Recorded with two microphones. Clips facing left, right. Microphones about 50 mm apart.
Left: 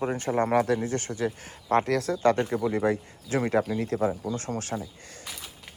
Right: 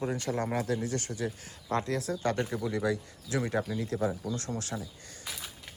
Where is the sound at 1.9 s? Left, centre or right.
Left.